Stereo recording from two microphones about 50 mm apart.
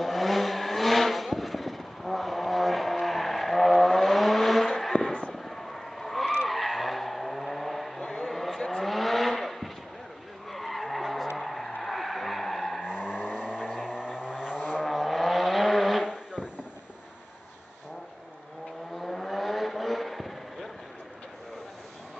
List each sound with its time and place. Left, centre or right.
0.0 s vehicle: centre
11.8 s skidding: centre
12.8 s vehicle: centre
14.9 s vehicle: centre
16.0 s vehicle: centre
18.9 s vehicle: centre